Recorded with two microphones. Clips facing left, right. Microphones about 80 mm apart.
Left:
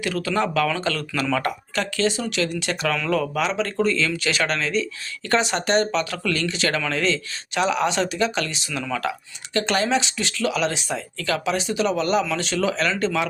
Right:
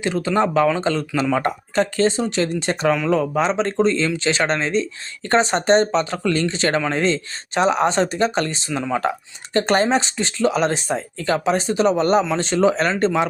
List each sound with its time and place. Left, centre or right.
0.0 s speech: right
2.9 s speech: centre
3.3 s speech: right